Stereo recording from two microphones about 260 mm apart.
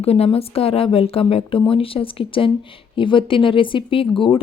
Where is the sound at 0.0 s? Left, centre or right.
Left.